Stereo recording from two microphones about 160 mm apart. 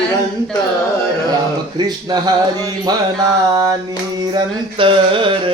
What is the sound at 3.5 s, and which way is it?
Speech, 25° right (ahead or behind).